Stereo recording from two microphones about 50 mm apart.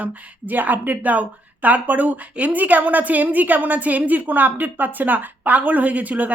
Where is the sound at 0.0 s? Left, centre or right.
Right.